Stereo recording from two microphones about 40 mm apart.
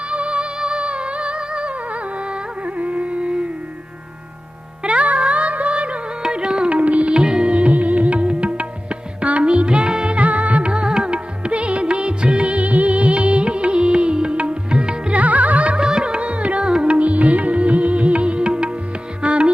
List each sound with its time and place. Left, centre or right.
0.1 s music: right
4.8 s music: right
6.7 s music: right
7.1 s music: centre
10.2 s music: right
15.2 s music: right
15.8 s music: right